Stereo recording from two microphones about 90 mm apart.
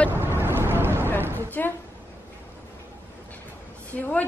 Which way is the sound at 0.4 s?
25° right (ahead or behind).